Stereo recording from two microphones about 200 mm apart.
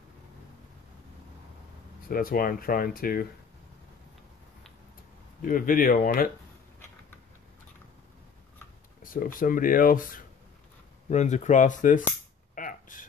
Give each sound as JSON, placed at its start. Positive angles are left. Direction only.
{"t": 2.0, "sound": "speech", "side_deg": 45}
{"t": 5.4, "sound": "speech", "side_deg": 45}
{"t": 9.0, "sound": "speech", "side_deg": 45}
{"t": 12.5, "sound": "a sound", "side_deg": 40}